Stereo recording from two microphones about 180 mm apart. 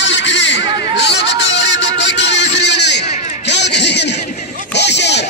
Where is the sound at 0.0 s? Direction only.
85° left.